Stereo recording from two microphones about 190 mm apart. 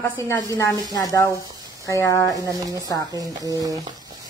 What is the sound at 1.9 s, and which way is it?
Speech, 15° left (ahead or behind).